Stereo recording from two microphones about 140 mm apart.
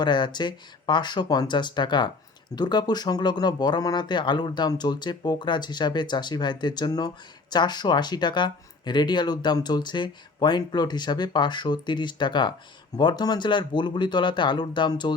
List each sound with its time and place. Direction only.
0.0 s speech: 30° left (ahead or behind)